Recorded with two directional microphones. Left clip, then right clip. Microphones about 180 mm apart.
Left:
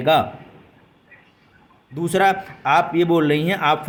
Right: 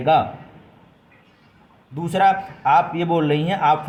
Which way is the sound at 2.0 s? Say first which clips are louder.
Right 1 dB; 35° left (ahead or behind).